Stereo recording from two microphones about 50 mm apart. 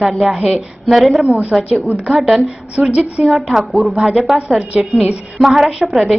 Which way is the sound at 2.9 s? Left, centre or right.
Right.